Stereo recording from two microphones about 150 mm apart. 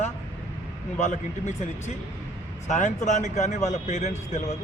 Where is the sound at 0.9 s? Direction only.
50° left (ahead or behind).